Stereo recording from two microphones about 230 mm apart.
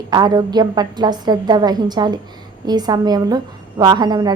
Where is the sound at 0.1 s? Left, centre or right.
Centre.